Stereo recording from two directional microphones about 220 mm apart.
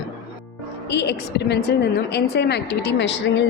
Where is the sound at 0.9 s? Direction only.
50° left (ahead or behind).